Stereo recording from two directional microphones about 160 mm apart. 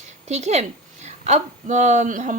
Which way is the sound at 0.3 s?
45° right (ahead or behind).